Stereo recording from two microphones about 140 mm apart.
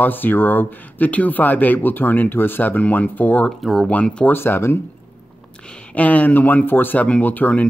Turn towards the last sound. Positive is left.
turn(degrees=10)  # may be behind; listen again after turning